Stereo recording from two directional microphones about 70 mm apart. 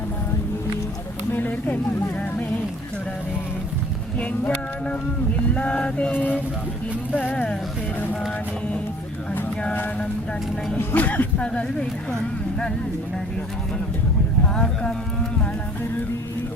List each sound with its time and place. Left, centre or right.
1.3 s a sound: left
4.2 s speech: centre
5.5 s a sound: centre
7.1 s speech: left
10.8 s speech: left
14.4 s speech: centre